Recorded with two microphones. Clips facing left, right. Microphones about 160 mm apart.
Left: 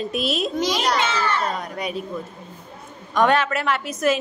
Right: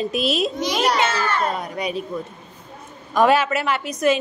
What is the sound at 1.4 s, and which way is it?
Speech, 5° right (ahead or behind).